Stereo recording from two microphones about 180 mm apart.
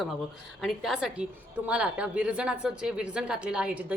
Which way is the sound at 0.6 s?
Centre (ahead or behind).